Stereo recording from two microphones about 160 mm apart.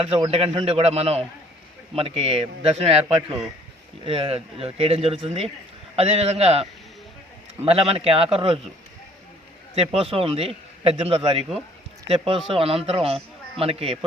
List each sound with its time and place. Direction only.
0.0 s a man's voice: 35° right (ahead or behind)
9.7 s a man's voice: 35° right (ahead or behind)